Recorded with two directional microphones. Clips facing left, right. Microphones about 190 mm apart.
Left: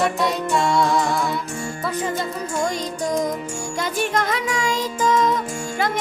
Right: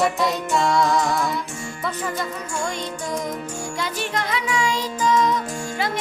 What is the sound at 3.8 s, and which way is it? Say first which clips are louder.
Music: left 5 dB; 45° left (ahead or behind).